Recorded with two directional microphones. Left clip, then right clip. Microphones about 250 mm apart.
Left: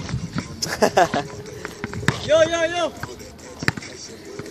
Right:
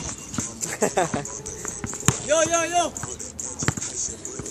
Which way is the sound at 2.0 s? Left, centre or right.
Centre.